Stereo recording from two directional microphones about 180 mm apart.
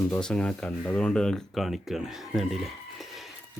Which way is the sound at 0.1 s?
5° left (ahead or behind).